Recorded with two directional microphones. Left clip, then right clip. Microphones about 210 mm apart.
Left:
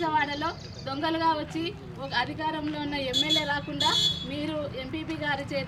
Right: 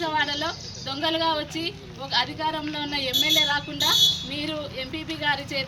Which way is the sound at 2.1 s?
Centre (ahead or behind).